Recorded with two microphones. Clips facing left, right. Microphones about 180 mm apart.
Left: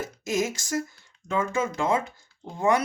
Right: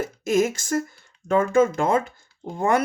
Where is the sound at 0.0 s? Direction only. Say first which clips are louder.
Right 6 dB; 55° right (ahead or behind).